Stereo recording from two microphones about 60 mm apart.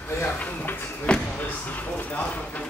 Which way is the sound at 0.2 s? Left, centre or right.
Left.